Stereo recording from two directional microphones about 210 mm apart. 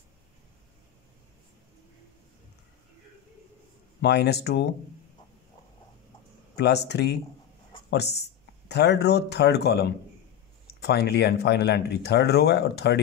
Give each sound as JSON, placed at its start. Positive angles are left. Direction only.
{"t": 4.0, "sound": "speech", "side_deg": 55}
{"t": 6.5, "sound": "speech", "side_deg": 55}